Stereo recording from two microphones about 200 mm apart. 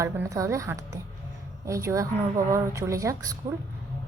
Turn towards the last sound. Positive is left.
turn(degrees=-15)  # may be behind; listen again after turning